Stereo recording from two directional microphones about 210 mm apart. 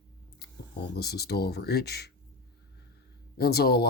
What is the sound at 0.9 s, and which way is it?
Speech, 50° left (ahead or behind).